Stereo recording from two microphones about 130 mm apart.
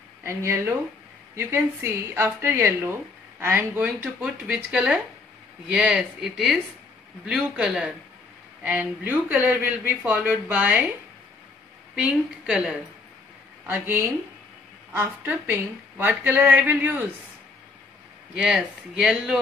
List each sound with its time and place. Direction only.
0.2 s speech: 20° right (ahead or behind)
11.9 s speech: 10° right (ahead or behind)
13.7 s speech: 20° right (ahead or behind)
18.3 s speech: 5° right (ahead or behind)